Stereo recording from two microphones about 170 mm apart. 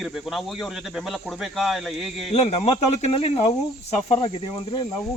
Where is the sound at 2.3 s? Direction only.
40° left (ahead or behind).